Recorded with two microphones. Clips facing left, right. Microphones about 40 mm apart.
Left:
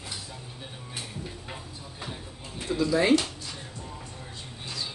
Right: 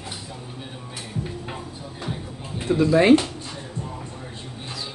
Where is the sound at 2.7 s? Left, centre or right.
Right.